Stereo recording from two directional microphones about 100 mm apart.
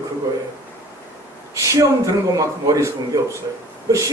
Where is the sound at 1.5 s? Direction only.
35° right (ahead or behind).